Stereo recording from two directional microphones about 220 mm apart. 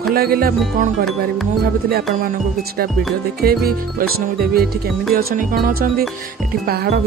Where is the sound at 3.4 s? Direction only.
45° right (ahead or behind).